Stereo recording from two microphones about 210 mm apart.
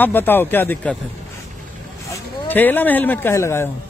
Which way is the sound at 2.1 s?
10° left (ahead or behind).